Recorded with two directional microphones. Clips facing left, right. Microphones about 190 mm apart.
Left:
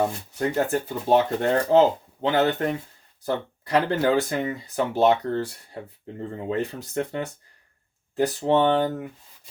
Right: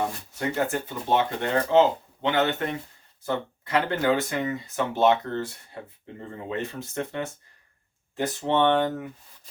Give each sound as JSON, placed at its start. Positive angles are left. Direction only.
{"t": 0.3, "sound": "speech", "side_deg": 35}
{"t": 6.5, "sound": "speech", "side_deg": 35}